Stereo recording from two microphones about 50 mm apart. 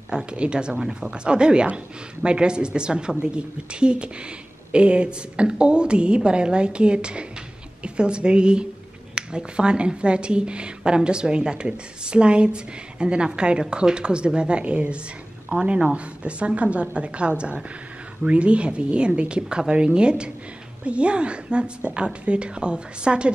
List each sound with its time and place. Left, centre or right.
0.1 s a woman's voice: centre